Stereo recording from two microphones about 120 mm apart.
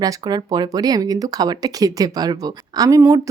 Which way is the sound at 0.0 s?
35° right (ahead or behind).